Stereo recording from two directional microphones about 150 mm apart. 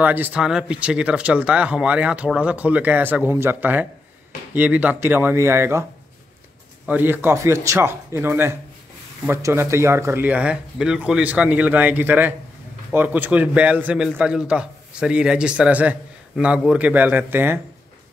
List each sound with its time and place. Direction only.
0.0 s a man's voice: 10° right (ahead or behind)
6.9 s a man's voice: 15° right (ahead or behind)